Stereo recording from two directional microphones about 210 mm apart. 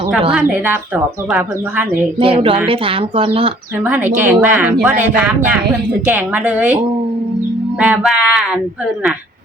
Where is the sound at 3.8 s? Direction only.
5° right (ahead or behind).